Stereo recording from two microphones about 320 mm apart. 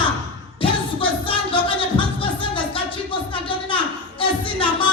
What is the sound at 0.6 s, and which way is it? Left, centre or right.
Music, centre.